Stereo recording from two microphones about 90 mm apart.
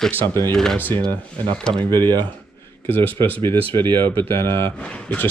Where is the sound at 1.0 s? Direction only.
50° right (ahead or behind).